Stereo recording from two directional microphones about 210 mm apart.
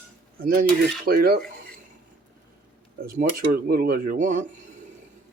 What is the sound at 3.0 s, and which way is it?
Speech, 45° right (ahead or behind).